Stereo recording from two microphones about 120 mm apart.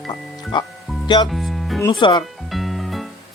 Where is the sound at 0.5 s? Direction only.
40° left (ahead or behind).